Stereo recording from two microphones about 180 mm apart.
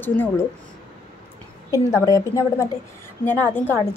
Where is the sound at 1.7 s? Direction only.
15° left (ahead or behind).